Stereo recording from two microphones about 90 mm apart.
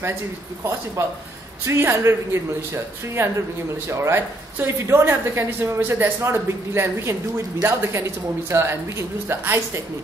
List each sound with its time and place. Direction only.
1.7 s a woman's voice: 30° right (ahead or behind)